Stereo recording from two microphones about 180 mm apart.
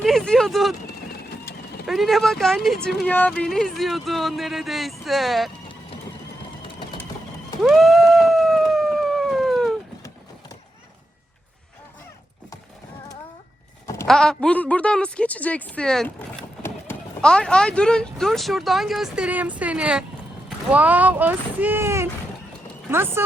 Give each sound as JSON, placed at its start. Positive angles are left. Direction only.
{"t": 0.0, "sound": "speech", "side_deg": 0}
{"t": 1.9, "sound": "a woman's voice", "side_deg": 0}
{"t": 7.6, "sound": "cat", "side_deg": 0}
{"t": 13.8, "sound": "sheep", "side_deg": 15}
{"t": 14.1, "sound": "a woman's voice", "side_deg": 5}